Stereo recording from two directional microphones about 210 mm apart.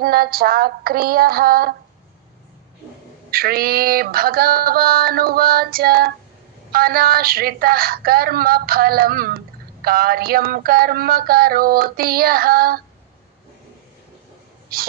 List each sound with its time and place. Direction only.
0.0 s a woman's voice: 45° right (ahead or behind)
3.3 s a woman's voice: 45° right (ahead or behind)
14.7 s a woman's voice: 45° right (ahead or behind)